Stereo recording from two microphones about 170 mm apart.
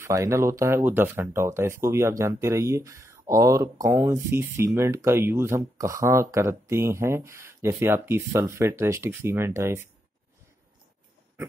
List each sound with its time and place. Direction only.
0.0 s speech: 15° right (ahead or behind)